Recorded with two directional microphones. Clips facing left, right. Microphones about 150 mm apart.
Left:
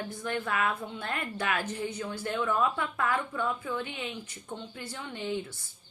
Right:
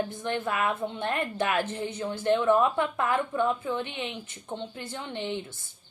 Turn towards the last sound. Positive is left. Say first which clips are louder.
# right 2 dB
turn(degrees=-25)  # may be behind; listen again after turning